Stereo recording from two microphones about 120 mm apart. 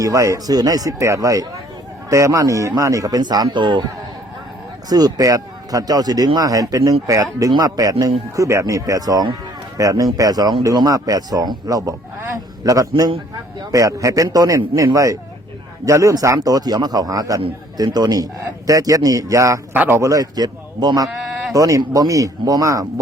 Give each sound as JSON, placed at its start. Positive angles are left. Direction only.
{"t": 0.0, "sound": "speech", "side_deg": -25}
{"t": 4.9, "sound": "speech", "side_deg": -35}
{"t": 19.7, "sound": "speech", "side_deg": -15}
{"t": 20.0, "sound": "speech", "side_deg": -30}